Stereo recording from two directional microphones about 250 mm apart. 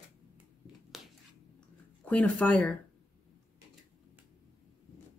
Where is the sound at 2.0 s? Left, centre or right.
Centre.